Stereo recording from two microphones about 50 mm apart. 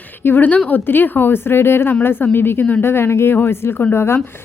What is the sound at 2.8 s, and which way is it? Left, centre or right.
A woman's voice, left.